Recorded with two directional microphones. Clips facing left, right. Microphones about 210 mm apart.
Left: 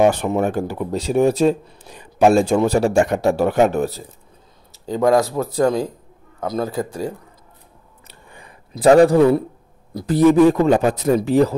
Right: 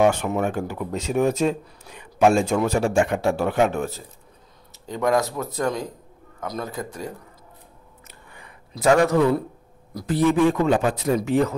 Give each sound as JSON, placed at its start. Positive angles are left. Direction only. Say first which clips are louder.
{"t": 0.0, "sound": "speech", "louder": "left 4 dB", "side_deg": 35}
{"t": 8.1, "sound": "a sound", "louder": "left 4 dB", "side_deg": 30}
{"t": 9.9, "sound": "speech", "louder": "left 6 dB", "side_deg": 40}